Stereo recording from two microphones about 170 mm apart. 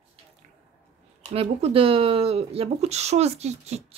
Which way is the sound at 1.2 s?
35° right (ahead or behind).